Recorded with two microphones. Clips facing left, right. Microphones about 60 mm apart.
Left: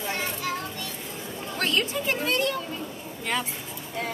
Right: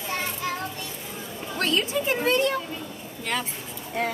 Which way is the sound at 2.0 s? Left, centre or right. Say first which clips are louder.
Right 3 dB; right.